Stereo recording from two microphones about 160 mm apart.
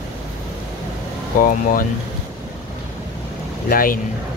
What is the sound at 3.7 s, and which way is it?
Speech, 60° left (ahead or behind).